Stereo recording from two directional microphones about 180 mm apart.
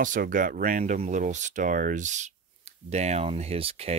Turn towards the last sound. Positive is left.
turn(degrees=-35)  # may be behind; listen again after turning